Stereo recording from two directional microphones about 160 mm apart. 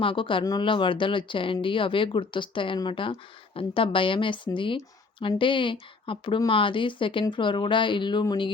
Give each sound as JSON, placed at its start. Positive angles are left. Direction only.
{"t": 0.0, "sound": "speech", "side_deg": 35}